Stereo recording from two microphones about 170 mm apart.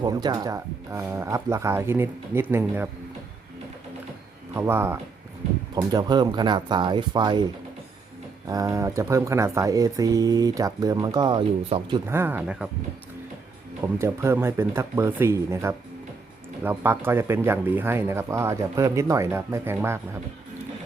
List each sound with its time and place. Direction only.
0.0 s speech: 25° right (ahead or behind)
4.5 s speech: 15° right (ahead or behind)
8.4 s speech: 20° right (ahead or behind)
12.0 s speech: 15° right (ahead or behind)
13.8 s speech: 15° right (ahead or behind)